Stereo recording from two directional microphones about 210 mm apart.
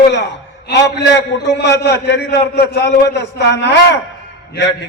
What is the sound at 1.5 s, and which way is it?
A man's voice, 50° left (ahead or behind).